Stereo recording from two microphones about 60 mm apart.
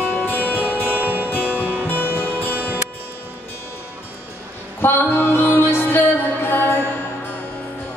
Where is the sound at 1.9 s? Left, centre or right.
Left.